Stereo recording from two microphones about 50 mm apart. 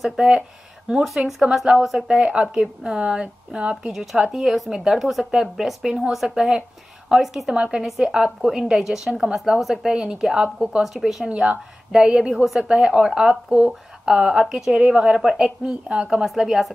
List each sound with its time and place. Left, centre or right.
1.0 s a woman's voice: centre; by 3.9 s right
3.9 s a woman's voice: centre
7.5 s a woman's voice: centre
8.4 s a woman's voice: centre
10.8 s a woman's voice: centre
11.2 s a woman's voice: right
15.1 s a woman's voice: centre